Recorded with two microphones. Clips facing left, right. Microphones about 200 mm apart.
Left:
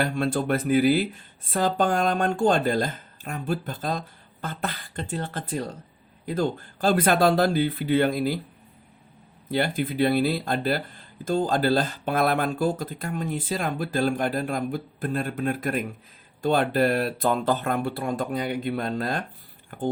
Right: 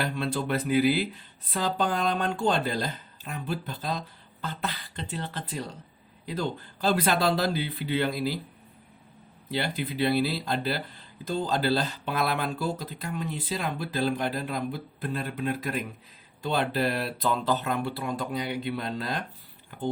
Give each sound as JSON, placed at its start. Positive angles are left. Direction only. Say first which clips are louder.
{"t": 0.0, "sound": "speech", "louder": "left 5 dB", "side_deg": 50}
{"t": 9.5, "sound": "speech", "louder": "left 5 dB", "side_deg": 50}